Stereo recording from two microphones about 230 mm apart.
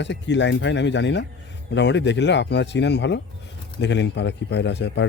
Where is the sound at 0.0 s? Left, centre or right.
Left.